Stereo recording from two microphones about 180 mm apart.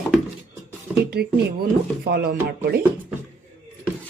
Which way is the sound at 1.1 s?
60° right (ahead or behind).